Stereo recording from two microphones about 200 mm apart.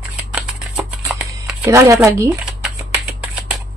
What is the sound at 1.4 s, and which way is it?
Speech, 10° right (ahead or behind).